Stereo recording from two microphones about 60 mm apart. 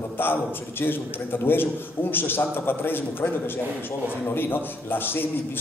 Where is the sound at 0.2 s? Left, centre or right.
Left.